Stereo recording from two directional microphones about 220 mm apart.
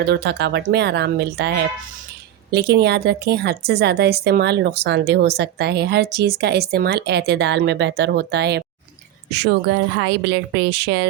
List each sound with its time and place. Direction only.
0.0 s a woman's voice: 50° right (ahead or behind)